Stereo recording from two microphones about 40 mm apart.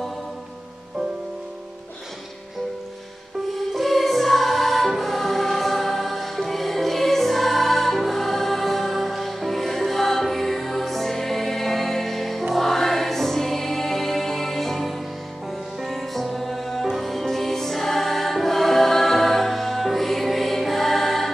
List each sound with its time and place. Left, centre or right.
3.5 s music: centre
12.5 s choir: centre
15.8 s music: centre